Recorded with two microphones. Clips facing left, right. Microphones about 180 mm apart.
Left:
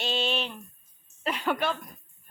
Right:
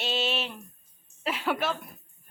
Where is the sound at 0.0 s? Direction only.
5° right (ahead or behind).